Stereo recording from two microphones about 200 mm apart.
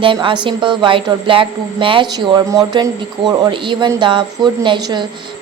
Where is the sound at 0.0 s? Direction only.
25° right (ahead or behind).